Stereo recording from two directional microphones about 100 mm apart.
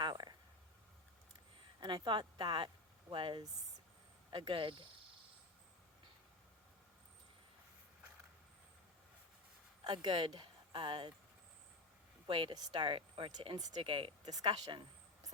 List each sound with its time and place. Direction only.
0.0 s a sound: 45° right (ahead or behind)
1.8 s speech: 55° right (ahead or behind)
9.8 s speech: 50° right (ahead or behind)
12.3 s speech: 55° right (ahead or behind)
13.6 s speech: 40° right (ahead or behind)
13.8 s speech: 60° right (ahead or behind)
14.3 s speech: 40° right (ahead or behind)